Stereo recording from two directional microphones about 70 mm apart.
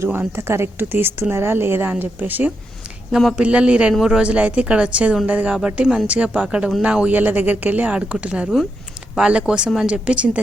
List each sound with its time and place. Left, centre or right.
0.1 s a woman's voice: right
3.1 s speech: centre
3.3 s speech: centre